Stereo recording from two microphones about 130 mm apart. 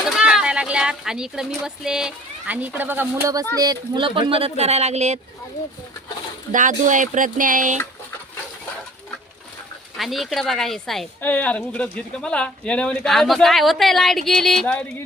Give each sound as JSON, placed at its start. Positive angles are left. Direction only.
{"t": 0.2, "sound": "speech", "side_deg": -5}
{"t": 3.5, "sound": "speech", "side_deg": -30}
{"t": 6.5, "sound": "speech", "side_deg": -80}
{"t": 10.0, "sound": "speech", "side_deg": 0}
{"t": 11.2, "sound": "speech", "side_deg": 10}